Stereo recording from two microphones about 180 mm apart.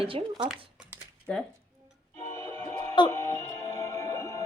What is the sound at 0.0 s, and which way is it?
Speech, 30° right (ahead or behind).